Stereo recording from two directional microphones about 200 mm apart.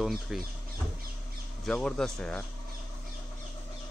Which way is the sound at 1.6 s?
Centre (ahead or behind).